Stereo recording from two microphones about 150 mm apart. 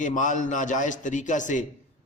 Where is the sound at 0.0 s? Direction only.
55° left (ahead or behind).